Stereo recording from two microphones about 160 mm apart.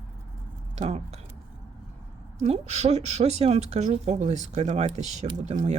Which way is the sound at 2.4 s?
40° right (ahead or behind).